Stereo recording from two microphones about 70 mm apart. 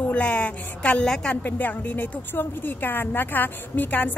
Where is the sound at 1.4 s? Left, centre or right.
Left.